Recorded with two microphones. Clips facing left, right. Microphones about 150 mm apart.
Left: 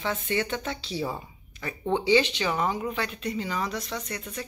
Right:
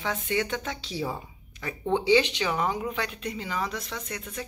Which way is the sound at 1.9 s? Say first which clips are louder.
Even; 15° right (ahead or behind).